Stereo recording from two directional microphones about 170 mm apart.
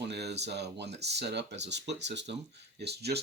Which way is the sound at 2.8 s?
75° right (ahead or behind).